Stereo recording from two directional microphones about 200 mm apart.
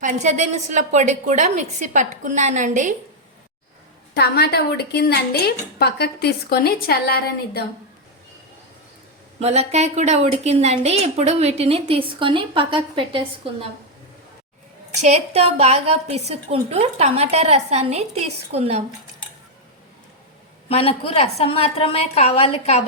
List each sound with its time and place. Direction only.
0.0 s a woman's voice: 40° right (ahead or behind)
4.1 s a woman's voice: 55° left (ahead or behind)
9.4 s a woman's voice: 35° right (ahead or behind)
15.0 s a woman's voice: 30° right (ahead or behind)
20.7 s a woman's voice: 30° left (ahead or behind)